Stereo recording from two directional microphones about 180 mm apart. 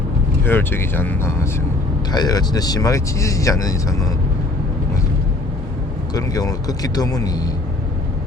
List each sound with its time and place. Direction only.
0.4 s speech: 10° left (ahead or behind)
6.1 s speech: 20° left (ahead or behind)